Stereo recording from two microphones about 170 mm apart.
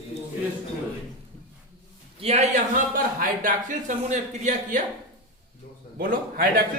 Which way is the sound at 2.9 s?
55° right (ahead or behind).